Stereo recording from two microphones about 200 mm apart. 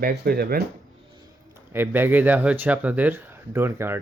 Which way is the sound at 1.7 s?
10° right (ahead or behind).